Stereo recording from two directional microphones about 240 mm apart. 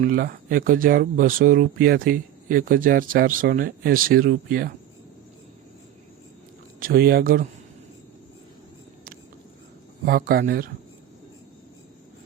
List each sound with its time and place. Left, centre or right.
0.0 s speech: right
6.7 s speech: right
10.1 s speech: right